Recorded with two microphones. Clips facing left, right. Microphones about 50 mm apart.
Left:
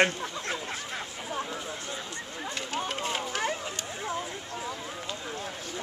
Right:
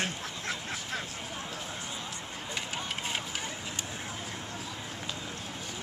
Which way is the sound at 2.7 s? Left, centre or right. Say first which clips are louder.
Left 6 dB; centre.